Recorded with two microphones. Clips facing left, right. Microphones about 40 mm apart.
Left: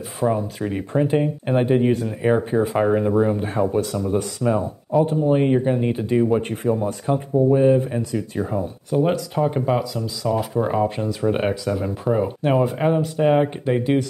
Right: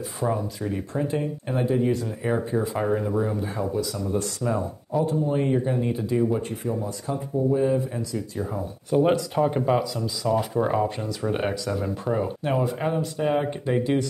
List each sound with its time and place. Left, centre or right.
0.2 s speech: centre
0.6 s speech: left
2.0 s speech: left
3.3 s speech: left
4.2 s speech: centre
5.0 s speech: left
8.9 s speech: centre
12.4 s speech: centre